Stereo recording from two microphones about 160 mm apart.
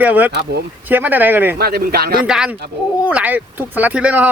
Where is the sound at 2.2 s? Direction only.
5° right (ahead or behind).